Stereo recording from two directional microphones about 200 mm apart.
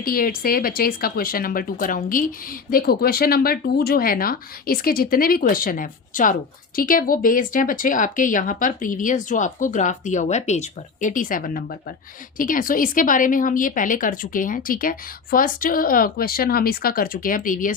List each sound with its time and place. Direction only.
0.0 s speech: 45° left (ahead or behind)